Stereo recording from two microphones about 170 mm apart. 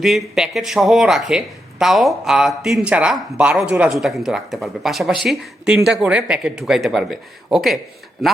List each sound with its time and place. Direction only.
0.0 s speech: centre (ahead or behind)